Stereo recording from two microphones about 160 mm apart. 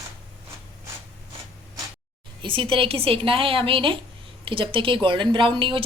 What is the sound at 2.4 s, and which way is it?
A woman's voice, 30° right (ahead or behind).